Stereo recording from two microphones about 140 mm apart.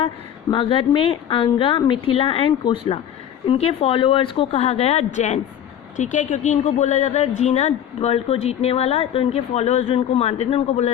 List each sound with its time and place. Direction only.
0.5 s a woman's voice: 40° left (ahead or behind)